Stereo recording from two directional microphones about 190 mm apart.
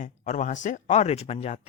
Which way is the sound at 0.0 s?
40° left (ahead or behind).